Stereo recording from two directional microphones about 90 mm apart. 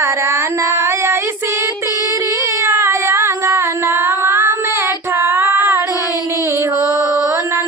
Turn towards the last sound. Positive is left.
turn(degrees=-25)  # may be behind; listen again after turning